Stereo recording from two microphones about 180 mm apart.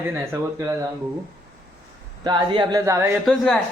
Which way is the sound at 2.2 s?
25° right (ahead or behind).